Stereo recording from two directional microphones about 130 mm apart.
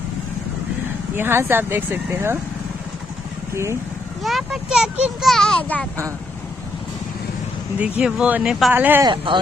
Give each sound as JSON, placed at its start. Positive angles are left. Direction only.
{"t": 1.1, "sound": "speech", "side_deg": -20}
{"t": 4.2, "sound": "speech", "side_deg": 0}
{"t": 5.3, "sound": "speech", "side_deg": 5}
{"t": 7.8, "sound": "speech", "side_deg": -10}
{"t": 9.0, "sound": "speech", "side_deg": -40}